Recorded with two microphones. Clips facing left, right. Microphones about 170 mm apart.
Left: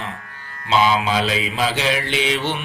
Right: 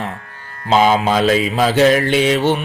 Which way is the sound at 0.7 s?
45° right (ahead or behind).